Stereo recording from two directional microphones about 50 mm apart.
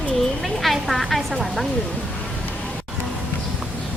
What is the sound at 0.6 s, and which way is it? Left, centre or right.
Speech, centre.